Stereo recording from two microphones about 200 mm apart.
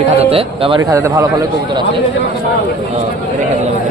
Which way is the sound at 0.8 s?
15° right (ahead or behind).